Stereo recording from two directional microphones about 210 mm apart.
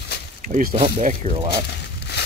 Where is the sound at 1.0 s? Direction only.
40° right (ahead or behind).